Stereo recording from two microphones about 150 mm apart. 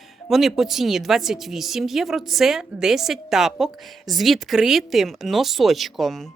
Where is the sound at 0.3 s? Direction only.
Centre (ahead or behind).